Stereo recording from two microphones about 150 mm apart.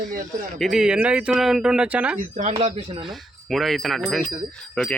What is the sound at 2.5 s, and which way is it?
Speech, 40° right (ahead or behind).